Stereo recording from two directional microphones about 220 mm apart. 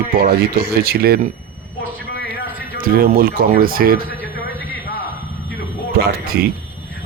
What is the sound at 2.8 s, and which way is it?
Speech, 40° right (ahead or behind).